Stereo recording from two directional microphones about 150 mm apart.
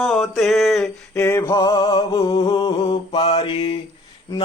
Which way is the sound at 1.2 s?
15° left (ahead or behind).